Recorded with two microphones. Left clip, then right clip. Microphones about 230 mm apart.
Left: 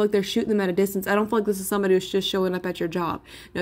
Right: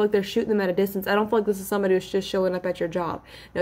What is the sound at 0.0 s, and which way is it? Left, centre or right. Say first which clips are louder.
Speech: even; left.